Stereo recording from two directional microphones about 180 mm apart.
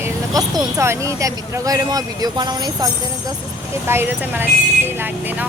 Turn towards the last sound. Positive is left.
turn(degrees=-10)  # may be behind; listen again after turning